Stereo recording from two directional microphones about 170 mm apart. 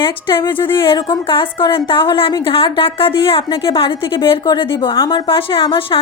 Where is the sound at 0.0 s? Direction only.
30° left (ahead or behind).